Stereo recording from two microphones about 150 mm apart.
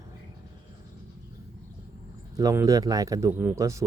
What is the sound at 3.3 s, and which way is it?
Speech, 10° right (ahead or behind).